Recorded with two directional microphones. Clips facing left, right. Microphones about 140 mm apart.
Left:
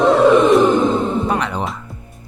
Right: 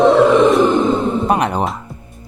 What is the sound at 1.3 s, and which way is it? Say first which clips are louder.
Speech: right 4 dB; 50° right (ahead or behind).